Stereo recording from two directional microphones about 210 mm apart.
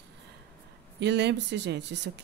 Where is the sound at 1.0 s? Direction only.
55° right (ahead or behind).